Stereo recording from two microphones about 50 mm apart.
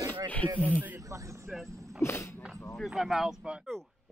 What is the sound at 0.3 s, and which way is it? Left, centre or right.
Speech, left.